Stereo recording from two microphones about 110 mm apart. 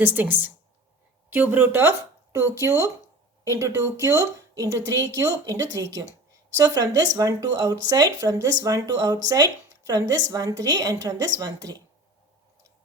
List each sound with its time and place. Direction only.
0.0 s a woman's voice: 20° right (ahead or behind); by 11.8 s 35° right (ahead or behind)